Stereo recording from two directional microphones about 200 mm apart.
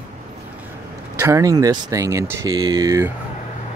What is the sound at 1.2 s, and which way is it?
Speech, 15° right (ahead or behind).